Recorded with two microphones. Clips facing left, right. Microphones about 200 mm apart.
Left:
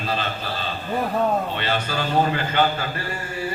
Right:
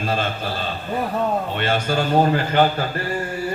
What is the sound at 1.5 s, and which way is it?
A man's voice, 50° right (ahead or behind).